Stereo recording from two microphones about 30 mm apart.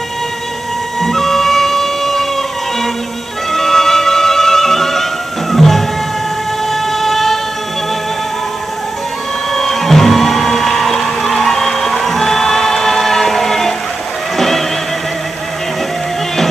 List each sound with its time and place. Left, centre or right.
1.0 s music: centre
6.7 s train: centre
9.5 s music: centre